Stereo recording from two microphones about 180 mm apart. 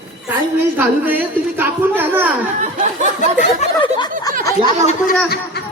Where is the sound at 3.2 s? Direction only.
45° left (ahead or behind).